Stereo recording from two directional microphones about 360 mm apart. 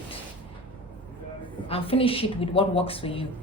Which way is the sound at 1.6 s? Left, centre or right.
Centre.